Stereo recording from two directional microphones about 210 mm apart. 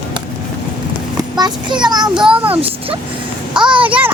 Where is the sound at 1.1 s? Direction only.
20° right (ahead or behind).